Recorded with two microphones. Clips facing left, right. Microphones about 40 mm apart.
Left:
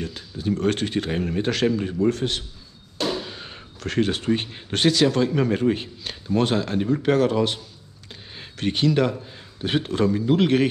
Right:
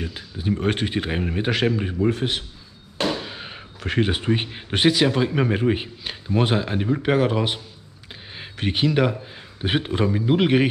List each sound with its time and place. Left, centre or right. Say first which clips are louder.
0.0 s speech: left 1 dB; centre